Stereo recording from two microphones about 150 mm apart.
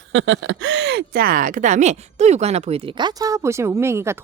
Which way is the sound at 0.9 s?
85° right.